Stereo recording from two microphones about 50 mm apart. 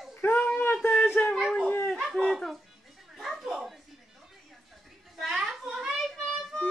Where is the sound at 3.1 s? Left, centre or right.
Centre.